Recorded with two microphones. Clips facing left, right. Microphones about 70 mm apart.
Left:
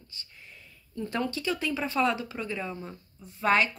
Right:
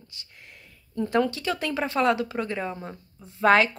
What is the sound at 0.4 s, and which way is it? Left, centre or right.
Speech, right.